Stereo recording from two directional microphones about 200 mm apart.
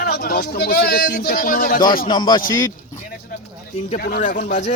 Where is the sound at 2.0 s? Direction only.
20° left (ahead or behind).